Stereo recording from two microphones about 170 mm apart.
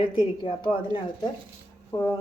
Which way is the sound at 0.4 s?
30° left (ahead or behind).